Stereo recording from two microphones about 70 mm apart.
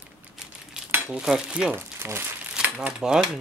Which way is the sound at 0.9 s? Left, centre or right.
Centre.